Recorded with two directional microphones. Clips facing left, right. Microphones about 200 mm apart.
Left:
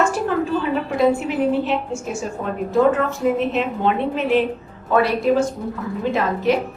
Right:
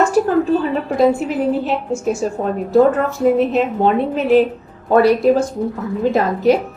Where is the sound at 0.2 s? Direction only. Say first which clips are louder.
Right 8 dB; 40° right (ahead or behind).